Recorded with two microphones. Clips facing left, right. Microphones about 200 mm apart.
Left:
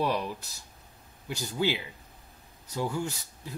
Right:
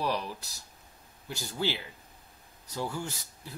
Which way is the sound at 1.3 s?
15° left (ahead or behind).